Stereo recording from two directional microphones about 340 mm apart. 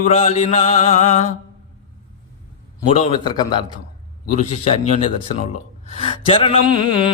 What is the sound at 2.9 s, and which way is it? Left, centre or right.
Speech, centre.